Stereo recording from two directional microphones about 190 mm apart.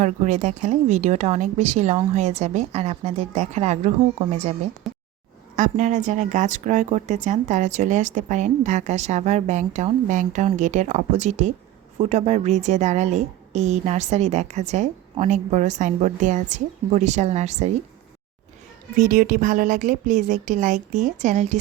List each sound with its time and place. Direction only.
0.0 s a woman's voice: 40° right (ahead or behind)
4.9 s a sound: centre (ahead or behind)
5.5 s a woman's voice: 40° right (ahead or behind)
18.9 s speech: 45° right (ahead or behind)